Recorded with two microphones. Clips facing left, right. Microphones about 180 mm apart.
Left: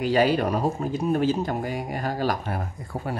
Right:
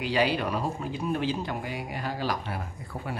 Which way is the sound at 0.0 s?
45° left (ahead or behind).